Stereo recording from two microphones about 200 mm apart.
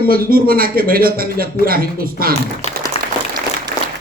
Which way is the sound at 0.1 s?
45° right (ahead or behind).